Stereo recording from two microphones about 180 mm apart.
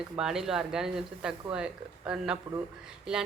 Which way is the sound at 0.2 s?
Centre (ahead or behind).